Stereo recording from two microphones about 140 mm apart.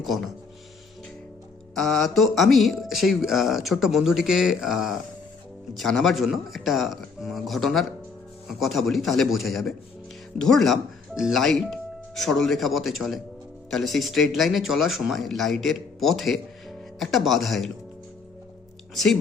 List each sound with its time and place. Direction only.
0.0 s speech: centre (ahead or behind)
1.7 s speech: 5° left (ahead or behind)
18.9 s speech: centre (ahead or behind)